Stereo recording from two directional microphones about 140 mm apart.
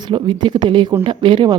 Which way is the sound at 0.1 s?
35° right (ahead or behind).